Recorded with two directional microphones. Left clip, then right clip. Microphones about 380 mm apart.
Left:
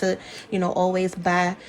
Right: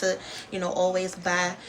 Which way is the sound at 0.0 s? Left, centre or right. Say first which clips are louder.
Left 2 dB; centre.